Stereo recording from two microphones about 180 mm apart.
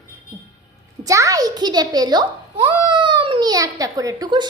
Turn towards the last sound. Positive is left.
turn(degrees=-20)  # may be behind; listen again after turning